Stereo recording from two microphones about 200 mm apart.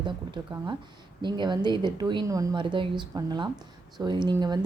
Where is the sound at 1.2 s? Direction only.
20° right (ahead or behind).